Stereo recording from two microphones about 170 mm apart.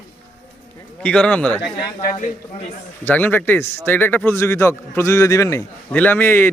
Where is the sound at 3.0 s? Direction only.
10° left (ahead or behind).